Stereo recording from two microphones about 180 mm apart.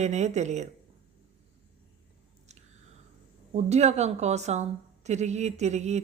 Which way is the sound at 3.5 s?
40° right (ahead or behind).